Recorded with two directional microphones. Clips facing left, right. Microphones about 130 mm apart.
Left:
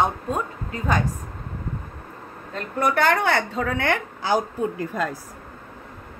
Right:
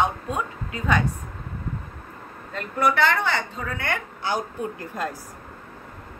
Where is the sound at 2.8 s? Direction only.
50° left (ahead or behind); by 3.9 s 90° left.